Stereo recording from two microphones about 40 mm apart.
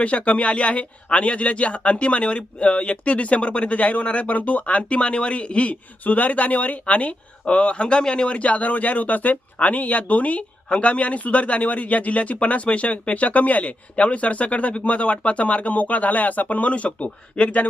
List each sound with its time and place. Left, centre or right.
0.0 s speech: left
8.4 s speech: left